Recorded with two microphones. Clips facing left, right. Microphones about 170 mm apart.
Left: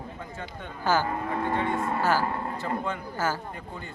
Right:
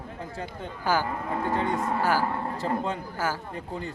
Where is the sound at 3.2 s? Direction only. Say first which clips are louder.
Left 1 dB; 10° right (ahead or behind).